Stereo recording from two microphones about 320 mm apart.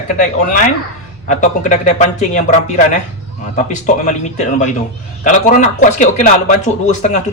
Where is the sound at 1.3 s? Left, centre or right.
Left.